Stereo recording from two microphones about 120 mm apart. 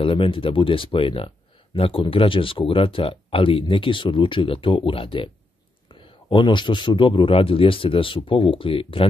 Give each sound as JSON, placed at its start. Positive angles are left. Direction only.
{"t": 0.0, "sound": "speech", "side_deg": 50}